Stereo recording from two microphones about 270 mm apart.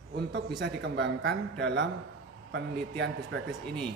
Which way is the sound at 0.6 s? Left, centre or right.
Right.